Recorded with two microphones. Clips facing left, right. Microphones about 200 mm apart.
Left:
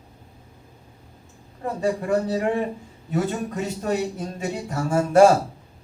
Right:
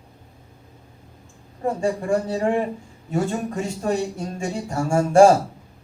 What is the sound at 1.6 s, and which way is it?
Speech, 25° right (ahead or behind).